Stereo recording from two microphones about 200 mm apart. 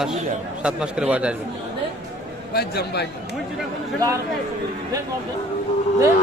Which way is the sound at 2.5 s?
50° left (ahead or behind).